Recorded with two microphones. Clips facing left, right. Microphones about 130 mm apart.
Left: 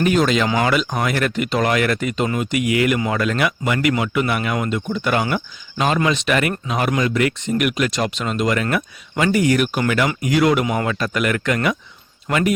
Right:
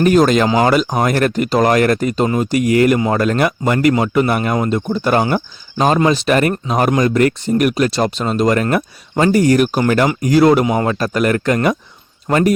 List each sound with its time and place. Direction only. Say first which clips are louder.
0.0 s speech: right 5 dB; 45° right (ahead or behind)